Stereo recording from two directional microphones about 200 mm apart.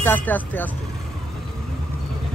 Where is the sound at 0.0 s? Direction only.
10° left (ahead or behind).